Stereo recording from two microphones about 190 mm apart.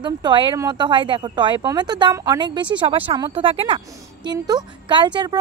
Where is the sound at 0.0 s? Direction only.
25° right (ahead or behind).